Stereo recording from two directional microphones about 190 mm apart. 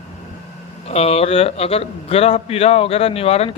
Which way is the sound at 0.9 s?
30° left (ahead or behind).